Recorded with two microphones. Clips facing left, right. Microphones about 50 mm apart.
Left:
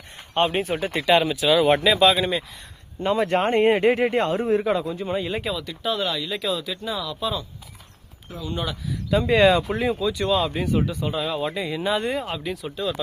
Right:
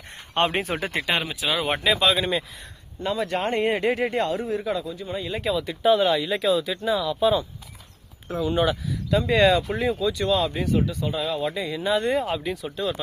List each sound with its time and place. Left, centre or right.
0.3 s speech: right
1.2 s speech: centre
3.0 s speech: left
5.5 s speech: centre
8.9 s speech: centre